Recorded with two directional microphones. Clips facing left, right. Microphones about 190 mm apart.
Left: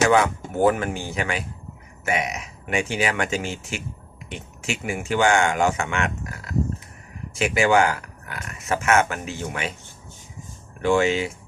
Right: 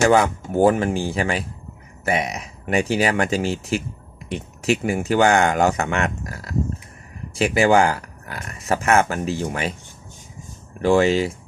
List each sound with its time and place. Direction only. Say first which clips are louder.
0.1 s speech: right 2 dB; 35° right (ahead or behind)
10.8 s speech: right 3 dB; 35° right (ahead or behind)